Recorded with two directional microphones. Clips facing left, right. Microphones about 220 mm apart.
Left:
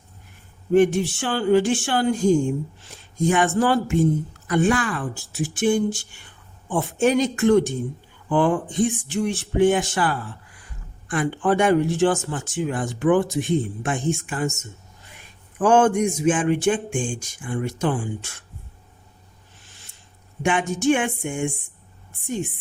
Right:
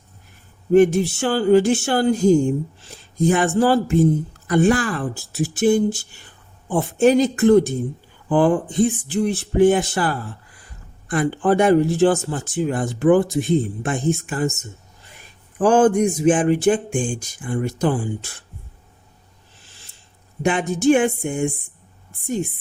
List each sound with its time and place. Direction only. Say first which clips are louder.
0.7 s speech: right 3 dB; 40° right (ahead or behind)
15.5 s speech: right 2 dB; 35° right (ahead or behind)
20.4 s speech: right 3 dB; 35° right (ahead or behind)